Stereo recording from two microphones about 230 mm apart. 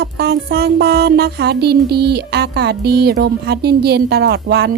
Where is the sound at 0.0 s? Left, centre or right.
Right.